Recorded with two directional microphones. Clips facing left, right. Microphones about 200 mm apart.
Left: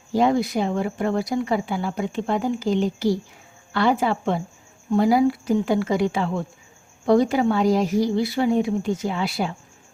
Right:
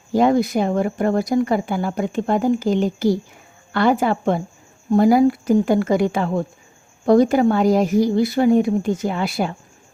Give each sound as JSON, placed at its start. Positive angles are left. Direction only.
{"t": 0.1, "sound": "speech", "side_deg": -50}